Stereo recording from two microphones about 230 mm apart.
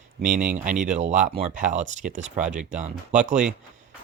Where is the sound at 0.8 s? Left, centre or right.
Right.